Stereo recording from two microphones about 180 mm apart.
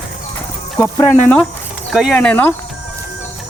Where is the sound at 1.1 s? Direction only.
5° left (ahead or behind).